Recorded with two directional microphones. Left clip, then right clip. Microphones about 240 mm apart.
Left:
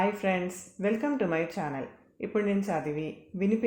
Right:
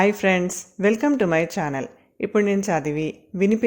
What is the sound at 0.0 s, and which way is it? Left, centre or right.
Speech, right.